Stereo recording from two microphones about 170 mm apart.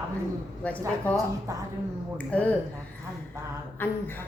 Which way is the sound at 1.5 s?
15° right (ahead or behind).